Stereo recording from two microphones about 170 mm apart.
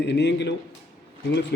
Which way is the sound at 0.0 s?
90° left.